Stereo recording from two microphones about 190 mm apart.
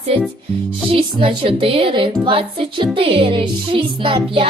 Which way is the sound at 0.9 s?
30° right (ahead or behind).